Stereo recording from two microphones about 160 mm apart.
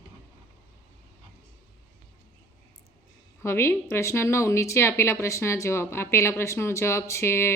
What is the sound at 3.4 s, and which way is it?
A woman's voice, 15° left (ahead or behind).